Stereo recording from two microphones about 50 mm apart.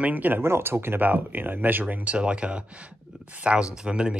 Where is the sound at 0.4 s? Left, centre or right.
Right.